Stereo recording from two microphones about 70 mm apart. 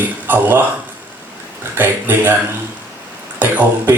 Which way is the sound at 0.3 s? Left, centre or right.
Right.